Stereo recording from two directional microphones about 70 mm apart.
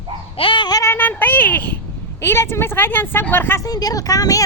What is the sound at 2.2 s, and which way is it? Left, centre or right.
A woman's voice, left.